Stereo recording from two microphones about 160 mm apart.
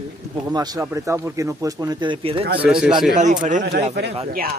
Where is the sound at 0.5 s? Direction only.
25° right (ahead or behind).